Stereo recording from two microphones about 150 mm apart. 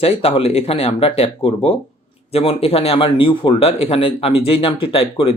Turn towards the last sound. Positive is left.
turn(degrees=35)  # may be behind; listen again after turning